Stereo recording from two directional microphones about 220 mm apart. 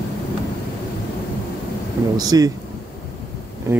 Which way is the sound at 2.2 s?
15° right (ahead or behind).